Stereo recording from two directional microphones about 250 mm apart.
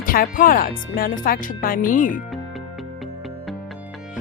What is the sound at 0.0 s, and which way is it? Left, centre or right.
Speech, left.